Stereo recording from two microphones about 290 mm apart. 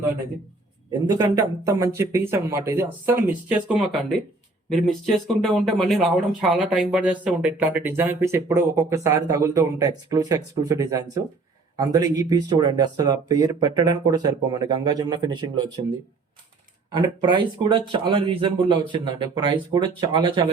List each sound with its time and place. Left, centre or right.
1.0 s speech: centre
16.9 s speech: centre